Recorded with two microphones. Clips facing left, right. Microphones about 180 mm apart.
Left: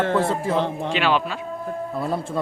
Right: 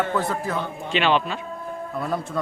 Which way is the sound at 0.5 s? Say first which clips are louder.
Left 6 dB; 90° left.